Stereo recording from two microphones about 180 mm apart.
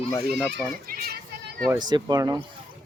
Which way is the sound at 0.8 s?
55° right (ahead or behind).